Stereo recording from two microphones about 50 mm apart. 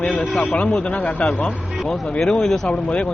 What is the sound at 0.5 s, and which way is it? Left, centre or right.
Speech, left.